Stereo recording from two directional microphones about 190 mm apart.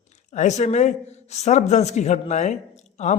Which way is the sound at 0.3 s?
40° left (ahead or behind).